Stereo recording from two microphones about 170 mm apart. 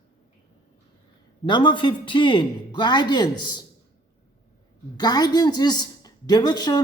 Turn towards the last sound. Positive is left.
turn(degrees=25)  # may be behind; listen again after turning